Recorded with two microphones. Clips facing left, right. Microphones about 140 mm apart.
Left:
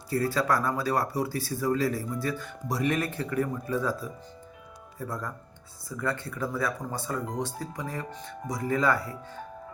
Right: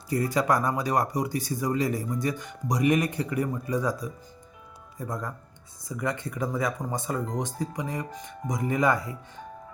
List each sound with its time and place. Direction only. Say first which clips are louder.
0.1 s speech: right 2 dB; 15° right (ahead or behind)